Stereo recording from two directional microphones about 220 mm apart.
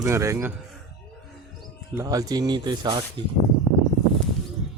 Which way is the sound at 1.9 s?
15° right (ahead or behind).